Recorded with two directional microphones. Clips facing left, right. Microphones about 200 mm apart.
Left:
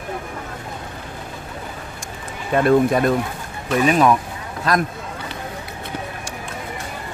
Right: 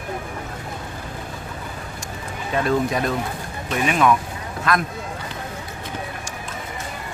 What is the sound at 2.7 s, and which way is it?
Speech, 50° left (ahead or behind).